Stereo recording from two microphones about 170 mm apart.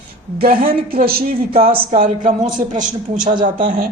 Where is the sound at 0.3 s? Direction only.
60° right (ahead or behind).